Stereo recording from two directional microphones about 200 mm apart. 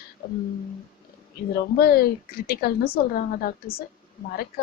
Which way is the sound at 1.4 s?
50° left (ahead or behind).